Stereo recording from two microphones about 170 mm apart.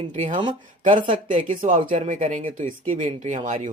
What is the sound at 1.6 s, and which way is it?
Speech, 50° right (ahead or behind).